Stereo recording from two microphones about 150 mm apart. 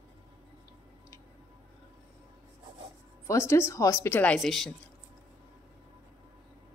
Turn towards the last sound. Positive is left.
turn(degrees=0)  # may be behind; listen again after turning